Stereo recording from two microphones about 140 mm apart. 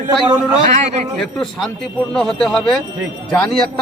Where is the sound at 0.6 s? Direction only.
55° right (ahead or behind).